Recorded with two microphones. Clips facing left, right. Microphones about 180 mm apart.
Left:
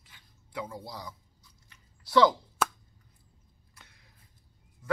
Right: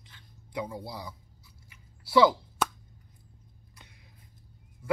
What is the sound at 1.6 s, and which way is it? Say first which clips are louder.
Scissors: right 4 dB; 10° right (ahead or behind).